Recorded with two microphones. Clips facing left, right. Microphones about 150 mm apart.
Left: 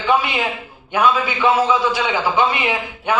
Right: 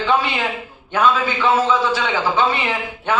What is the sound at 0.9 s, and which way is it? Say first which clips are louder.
A man's voice: even; 10° left (ahead or behind).